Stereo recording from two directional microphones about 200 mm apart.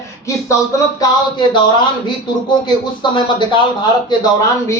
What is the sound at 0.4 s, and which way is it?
Speech, 15° left (ahead or behind).